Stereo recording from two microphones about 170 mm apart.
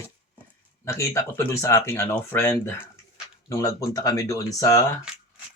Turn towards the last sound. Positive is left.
turn(degrees=20)  # may be behind; listen again after turning